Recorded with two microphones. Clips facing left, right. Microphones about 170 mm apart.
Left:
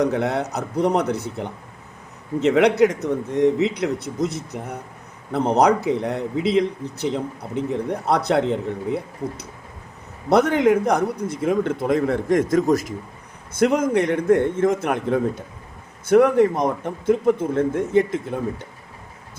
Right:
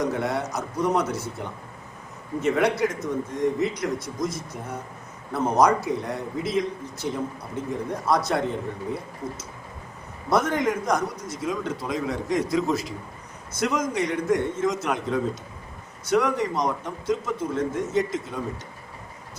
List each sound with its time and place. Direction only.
0.0 s a man's voice: 65° left (ahead or behind)
2.4 s a man's voice: 70° left (ahead or behind)
10.2 s a man's voice: 65° left (ahead or behind); by 12.9 s 45° left (ahead or behind)
13.5 s a man's voice: 60° left (ahead or behind)